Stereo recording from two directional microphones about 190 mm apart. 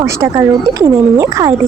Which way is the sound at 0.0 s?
20° right (ahead or behind).